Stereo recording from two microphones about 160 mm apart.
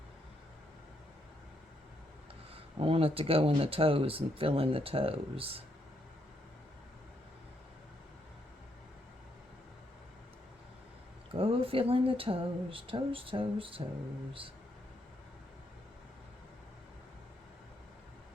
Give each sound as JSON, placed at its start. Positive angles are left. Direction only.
{"t": 2.8, "sound": "speech", "side_deg": -35}
{"t": 11.3, "sound": "speech", "side_deg": -35}